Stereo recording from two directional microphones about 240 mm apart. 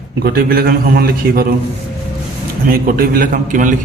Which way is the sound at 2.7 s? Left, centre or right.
Right.